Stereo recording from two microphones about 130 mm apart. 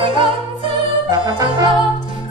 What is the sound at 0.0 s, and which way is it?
Music, 40° right (ahead or behind).